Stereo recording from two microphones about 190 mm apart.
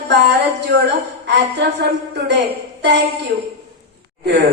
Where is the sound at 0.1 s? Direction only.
65° right (ahead or behind).